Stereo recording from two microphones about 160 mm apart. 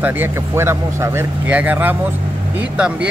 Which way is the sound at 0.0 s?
15° right (ahead or behind).